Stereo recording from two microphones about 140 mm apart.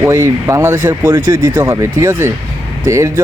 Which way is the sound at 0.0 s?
20° right (ahead or behind).